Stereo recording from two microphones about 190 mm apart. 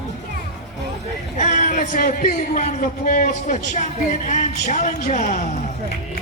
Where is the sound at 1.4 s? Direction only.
40° left (ahead or behind).